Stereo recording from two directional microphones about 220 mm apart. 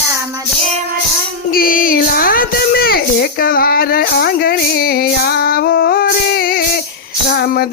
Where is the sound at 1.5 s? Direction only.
40° left (ahead or behind).